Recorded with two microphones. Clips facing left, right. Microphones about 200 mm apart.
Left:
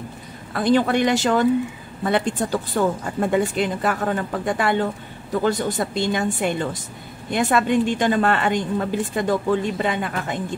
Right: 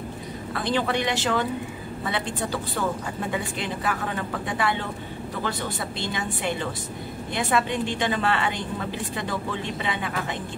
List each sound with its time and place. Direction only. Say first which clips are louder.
0.5 s a woman's voice: left 7 dB; 45° left (ahead or behind)